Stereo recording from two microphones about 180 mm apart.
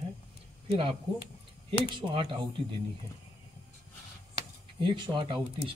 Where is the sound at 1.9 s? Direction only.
30° right (ahead or behind).